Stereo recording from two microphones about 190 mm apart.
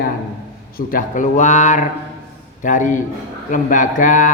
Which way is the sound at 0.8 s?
45° left (ahead or behind).